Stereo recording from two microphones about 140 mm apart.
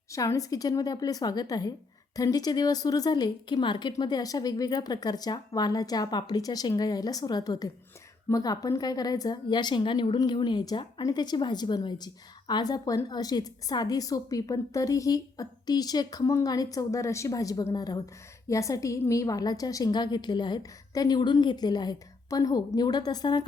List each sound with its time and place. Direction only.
0.1 s a woman's voice: 25° left (ahead or behind)